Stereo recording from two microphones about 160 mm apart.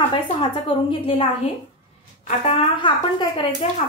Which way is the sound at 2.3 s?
35° left (ahead or behind).